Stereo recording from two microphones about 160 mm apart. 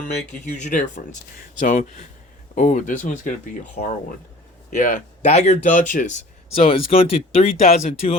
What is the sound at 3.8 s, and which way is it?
Speech, 75° left (ahead or behind).